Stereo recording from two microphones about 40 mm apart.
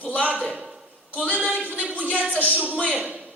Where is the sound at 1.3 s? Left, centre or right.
Right.